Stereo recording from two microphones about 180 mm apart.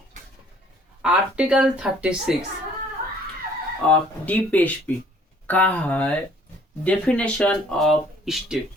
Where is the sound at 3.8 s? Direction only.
10° left (ahead or behind).